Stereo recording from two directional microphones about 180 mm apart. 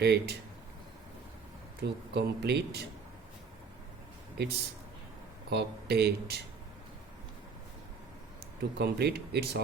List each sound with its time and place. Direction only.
0.0 s speech: 65° right (ahead or behind)
1.8 s speech: 65° right (ahead or behind)
4.4 s speech: 70° right (ahead or behind)
8.8 s speech: 65° right (ahead or behind)